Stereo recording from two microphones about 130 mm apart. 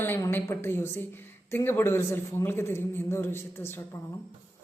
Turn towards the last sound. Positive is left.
turn(degrees=15)  # may be behind; listen again after turning